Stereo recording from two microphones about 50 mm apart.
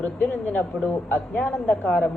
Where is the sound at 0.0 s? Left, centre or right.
Left.